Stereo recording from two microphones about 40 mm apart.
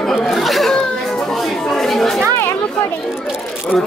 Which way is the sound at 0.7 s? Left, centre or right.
Centre.